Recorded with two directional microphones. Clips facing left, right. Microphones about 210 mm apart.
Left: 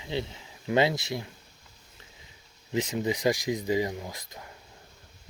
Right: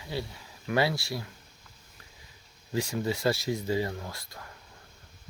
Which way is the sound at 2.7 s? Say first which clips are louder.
Left 2 dB; 20° left (ahead or behind).